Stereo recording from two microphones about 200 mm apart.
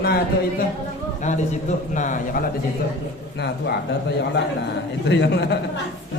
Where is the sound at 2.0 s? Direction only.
40° left (ahead or behind).